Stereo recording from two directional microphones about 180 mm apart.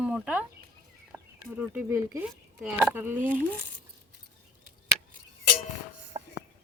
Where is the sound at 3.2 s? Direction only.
45° right (ahead or behind).